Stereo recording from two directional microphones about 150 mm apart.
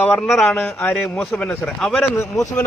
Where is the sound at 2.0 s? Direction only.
20° left (ahead or behind).